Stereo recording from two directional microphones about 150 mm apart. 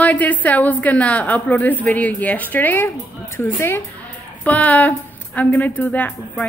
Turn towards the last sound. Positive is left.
turn(degrees=10)  # may be behind; listen again after turning